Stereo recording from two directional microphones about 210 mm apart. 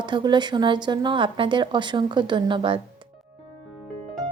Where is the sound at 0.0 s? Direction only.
20° right (ahead or behind).